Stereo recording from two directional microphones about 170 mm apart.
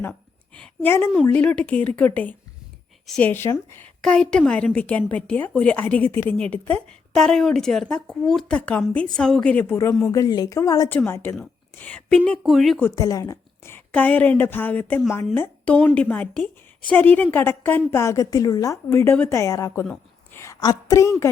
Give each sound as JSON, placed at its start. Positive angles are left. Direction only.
{"t": 0.0, "sound": "a woman's voice", "side_deg": 5}
{"t": 12.8, "sound": "a woman's voice", "side_deg": 20}